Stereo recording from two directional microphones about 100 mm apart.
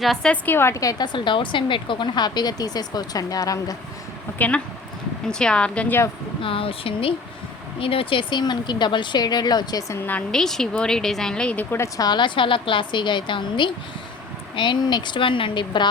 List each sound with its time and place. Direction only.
0.0 s speech: 5° left (ahead or behind)
0.4 s a woman's voice: 25° left (ahead or behind)
4.4 s speech: 15° left (ahead or behind)
6.4 s a woman's voice: 65° left (ahead or behind); by 9.8 s 45° left (ahead or behind)
9.9 s a woman's voice: 20° left (ahead or behind)
10.3 s speech: 5° left (ahead or behind)
11.9 s a woman's voice: 45° left (ahead or behind)